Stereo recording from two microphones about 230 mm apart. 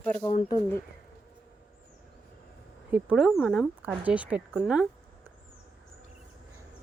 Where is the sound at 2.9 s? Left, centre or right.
Centre.